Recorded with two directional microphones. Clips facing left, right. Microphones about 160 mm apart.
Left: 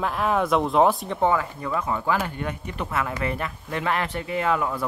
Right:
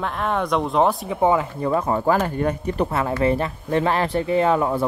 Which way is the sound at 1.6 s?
40° right (ahead or behind).